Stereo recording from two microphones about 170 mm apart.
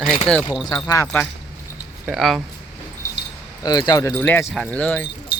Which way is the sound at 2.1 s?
Centre (ahead or behind).